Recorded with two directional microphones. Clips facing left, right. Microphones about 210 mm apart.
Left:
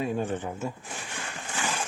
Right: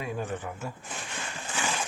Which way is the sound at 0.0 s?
30° left (ahead or behind).